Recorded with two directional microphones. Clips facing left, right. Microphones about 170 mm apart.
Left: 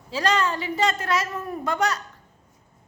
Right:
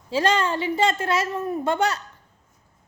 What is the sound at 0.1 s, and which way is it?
A woman's voice, 30° right (ahead or behind).